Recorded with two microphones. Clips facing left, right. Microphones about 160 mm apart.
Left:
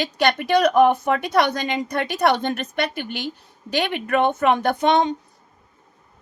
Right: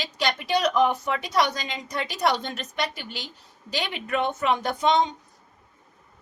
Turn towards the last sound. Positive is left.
turn(degrees=60)  # may be behind; listen again after turning